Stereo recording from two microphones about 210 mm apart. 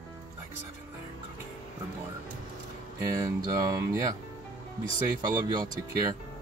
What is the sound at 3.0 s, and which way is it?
Speech, 15° right (ahead or behind).